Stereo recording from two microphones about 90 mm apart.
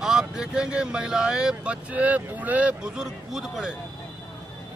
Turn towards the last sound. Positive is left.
turn(degrees=-5)  # may be behind; listen again after turning